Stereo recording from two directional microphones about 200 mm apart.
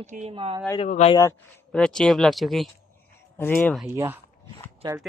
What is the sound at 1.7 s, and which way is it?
Speech, 5° left (ahead or behind).